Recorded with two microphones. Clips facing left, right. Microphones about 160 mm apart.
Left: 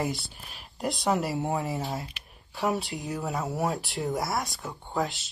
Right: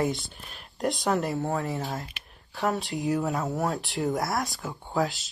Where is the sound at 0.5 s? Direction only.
Centre (ahead or behind).